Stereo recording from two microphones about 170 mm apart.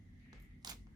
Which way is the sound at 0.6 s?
25° right (ahead or behind).